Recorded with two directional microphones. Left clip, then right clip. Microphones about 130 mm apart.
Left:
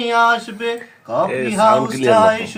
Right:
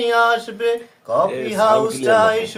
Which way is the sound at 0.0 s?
30° right (ahead or behind).